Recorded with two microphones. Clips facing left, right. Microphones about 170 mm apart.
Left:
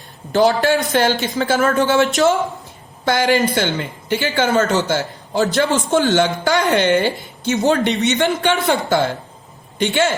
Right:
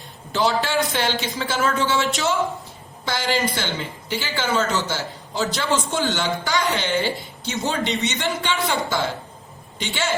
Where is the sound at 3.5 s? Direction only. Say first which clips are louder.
Left 7 dB; 65° left (ahead or behind).